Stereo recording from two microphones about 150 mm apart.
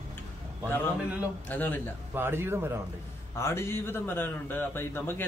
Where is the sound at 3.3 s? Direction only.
15° left (ahead or behind).